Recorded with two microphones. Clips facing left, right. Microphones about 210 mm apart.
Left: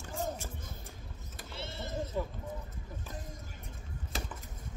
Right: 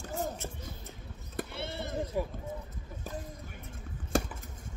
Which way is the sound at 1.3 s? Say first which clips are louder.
Right 7 dB; 60° right (ahead or behind).